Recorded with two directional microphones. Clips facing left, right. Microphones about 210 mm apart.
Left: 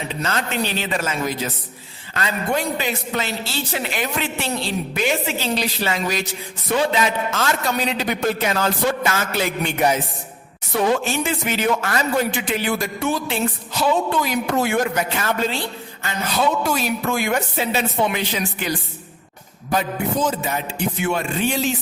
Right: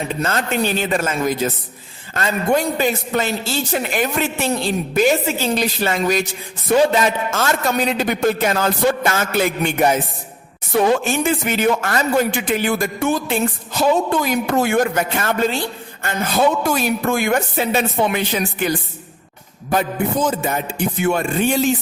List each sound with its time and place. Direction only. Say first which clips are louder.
0.1 s speech: right 4 dB; 50° right (ahead or behind)
19.7 s speech: right 3 dB; 50° right (ahead or behind)